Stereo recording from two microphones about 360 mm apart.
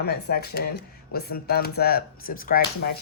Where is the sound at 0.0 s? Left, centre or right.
Left.